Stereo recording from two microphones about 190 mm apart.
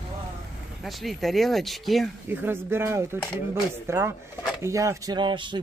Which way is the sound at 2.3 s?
10° right (ahead or behind).